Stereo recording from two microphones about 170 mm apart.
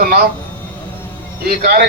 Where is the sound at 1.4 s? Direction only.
60° right (ahead or behind).